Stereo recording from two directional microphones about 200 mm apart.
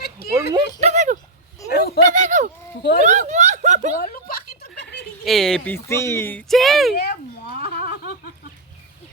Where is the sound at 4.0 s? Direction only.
45° left (ahead or behind).